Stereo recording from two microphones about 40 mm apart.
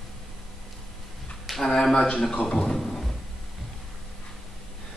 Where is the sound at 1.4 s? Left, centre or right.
Centre.